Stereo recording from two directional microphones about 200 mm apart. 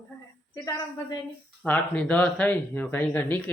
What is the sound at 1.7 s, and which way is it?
Speech, 5° left (ahead or behind).